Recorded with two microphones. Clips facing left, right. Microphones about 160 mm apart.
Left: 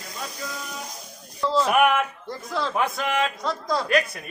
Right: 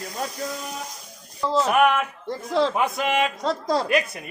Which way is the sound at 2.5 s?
25° right (ahead or behind).